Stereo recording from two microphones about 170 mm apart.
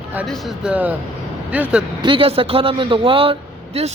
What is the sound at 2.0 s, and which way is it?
Speech, 30° right (ahead or behind).